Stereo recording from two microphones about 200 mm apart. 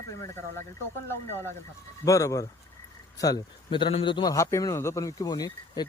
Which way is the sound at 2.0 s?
15° left (ahead or behind).